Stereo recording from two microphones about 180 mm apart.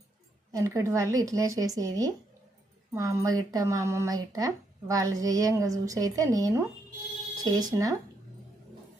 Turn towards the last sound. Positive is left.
turn(degrees=-20)  # may be behind; listen again after turning